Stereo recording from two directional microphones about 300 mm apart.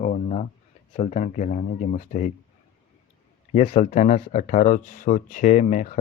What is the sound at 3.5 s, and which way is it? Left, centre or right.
Speech, left.